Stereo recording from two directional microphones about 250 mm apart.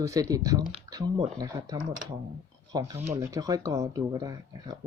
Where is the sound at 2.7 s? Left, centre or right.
Centre.